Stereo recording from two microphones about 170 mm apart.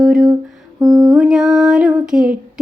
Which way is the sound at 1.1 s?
5° right (ahead or behind).